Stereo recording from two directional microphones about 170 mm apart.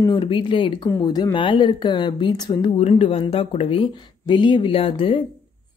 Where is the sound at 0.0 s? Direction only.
30° left (ahead or behind).